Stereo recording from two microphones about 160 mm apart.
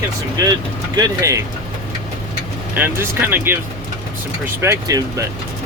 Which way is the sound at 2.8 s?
15° right (ahead or behind).